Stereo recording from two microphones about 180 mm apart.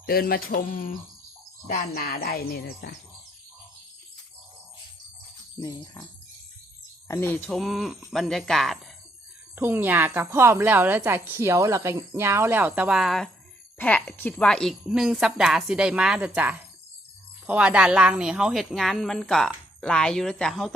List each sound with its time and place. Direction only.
0.0 s mantra: 55° left (ahead or behind)
1.6 s music: 50° left (ahead or behind)
5.5 s speech: 20° left (ahead or behind)
7.1 s a woman's voice: 10° left (ahead or behind)
9.6 s a woman's voice: 10° right (ahead or behind)